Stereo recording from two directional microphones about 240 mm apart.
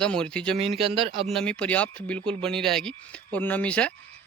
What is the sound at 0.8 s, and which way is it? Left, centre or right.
Speech, right.